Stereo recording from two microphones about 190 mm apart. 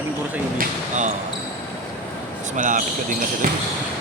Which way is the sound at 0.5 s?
40° right (ahead or behind).